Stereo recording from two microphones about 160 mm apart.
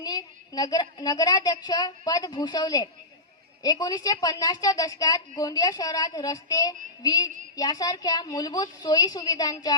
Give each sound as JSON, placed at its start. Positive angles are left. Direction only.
{"t": 0.0, "sound": "a woman's voice", "side_deg": 25}